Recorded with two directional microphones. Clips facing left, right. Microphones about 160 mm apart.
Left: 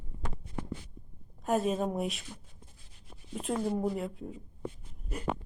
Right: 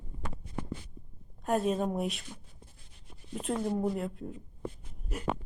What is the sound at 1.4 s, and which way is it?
Speech, centre (ahead or behind).